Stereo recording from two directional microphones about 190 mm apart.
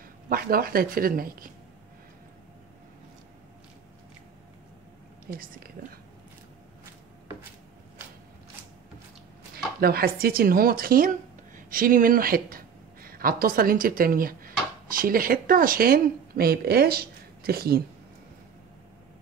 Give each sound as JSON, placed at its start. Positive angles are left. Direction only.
{"t": 0.3, "sound": "speech", "side_deg": -50}
{"t": 5.3, "sound": "speech", "side_deg": -50}
{"t": 9.8, "sound": "speech", "side_deg": -55}